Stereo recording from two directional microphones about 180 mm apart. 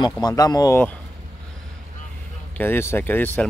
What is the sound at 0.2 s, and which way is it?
Speech, 20° left (ahead or behind).